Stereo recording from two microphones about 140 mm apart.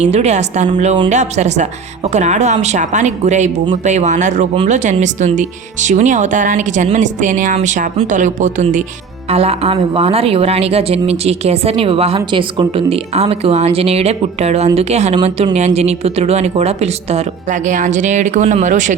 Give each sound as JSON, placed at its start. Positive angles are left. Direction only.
{"t": 0.0, "sound": "a woman's voice", "side_deg": -50}
{"t": 9.3, "sound": "a woman's voice", "side_deg": -45}